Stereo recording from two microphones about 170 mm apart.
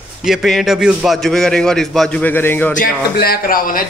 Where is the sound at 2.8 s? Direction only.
60° left (ahead or behind).